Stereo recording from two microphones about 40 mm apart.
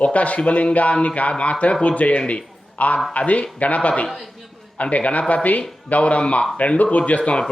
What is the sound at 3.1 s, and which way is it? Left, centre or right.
Speech, left.